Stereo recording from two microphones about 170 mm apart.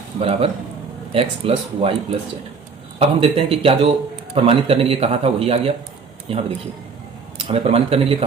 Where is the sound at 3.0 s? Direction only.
30° right (ahead or behind).